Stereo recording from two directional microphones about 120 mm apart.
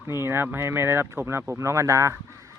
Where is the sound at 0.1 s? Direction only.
20° right (ahead or behind).